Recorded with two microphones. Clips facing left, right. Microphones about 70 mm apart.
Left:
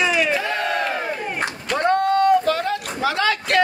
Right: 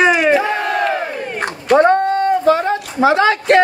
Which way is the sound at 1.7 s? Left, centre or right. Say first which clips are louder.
Right 11 dB; right.